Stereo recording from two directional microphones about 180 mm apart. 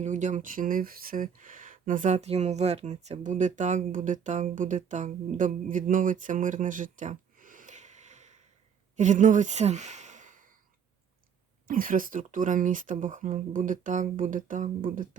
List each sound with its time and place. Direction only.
0.0 s speech: 45° right (ahead or behind)
11.7 s speech: 50° right (ahead or behind)